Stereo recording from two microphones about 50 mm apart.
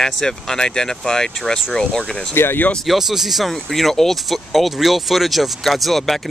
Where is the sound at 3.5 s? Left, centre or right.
Centre.